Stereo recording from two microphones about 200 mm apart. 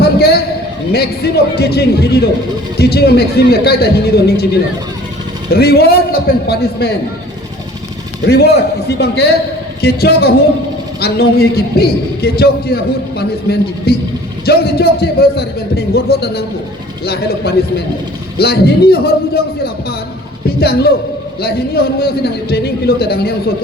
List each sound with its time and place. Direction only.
0.0 s a sound: 50° left (ahead or behind)
0.9 s a man's voice: 50° left (ahead or behind)
5.5 s a man's voice: 50° left (ahead or behind)
8.2 s a man's voice: 55° left (ahead or behind)